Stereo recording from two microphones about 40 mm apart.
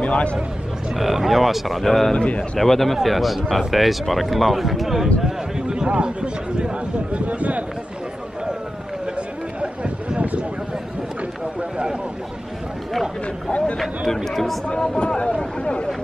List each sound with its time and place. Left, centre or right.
0.0 s speech: left
0.9 s speech: centre
2.1 s a man's voice: left
2.6 s speech: centre
5.7 s speech: right
9.1 s a sound: right
13.5 s a sound: left
13.7 s speech: centre
15.6 s a man's voice: left